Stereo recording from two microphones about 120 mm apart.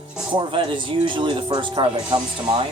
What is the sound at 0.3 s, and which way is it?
Speech, 45° right (ahead or behind).